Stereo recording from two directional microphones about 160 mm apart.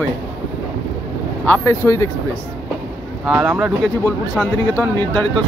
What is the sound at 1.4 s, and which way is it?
Speech, 15° left (ahead or behind).